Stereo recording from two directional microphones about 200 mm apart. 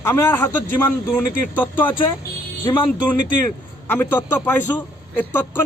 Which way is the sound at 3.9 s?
10° left (ahead or behind).